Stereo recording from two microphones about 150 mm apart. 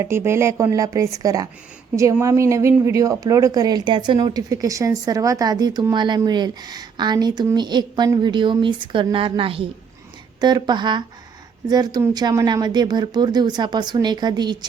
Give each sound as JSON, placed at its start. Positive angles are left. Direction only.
{"t": 0.0, "sound": "a woman's voice", "side_deg": -20}